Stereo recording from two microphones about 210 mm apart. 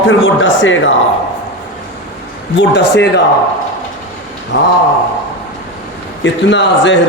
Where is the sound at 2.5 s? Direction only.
55° left (ahead or behind).